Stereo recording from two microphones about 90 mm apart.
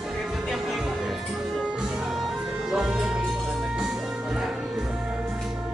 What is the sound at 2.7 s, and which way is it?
Music, 5° right (ahead or behind).